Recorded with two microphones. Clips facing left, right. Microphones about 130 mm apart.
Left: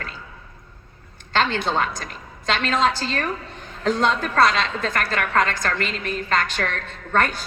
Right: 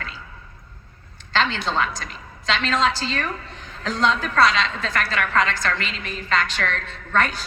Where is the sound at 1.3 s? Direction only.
50° left (ahead or behind).